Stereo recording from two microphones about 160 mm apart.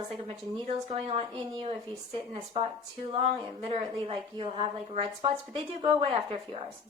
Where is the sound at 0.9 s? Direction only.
35° right (ahead or behind).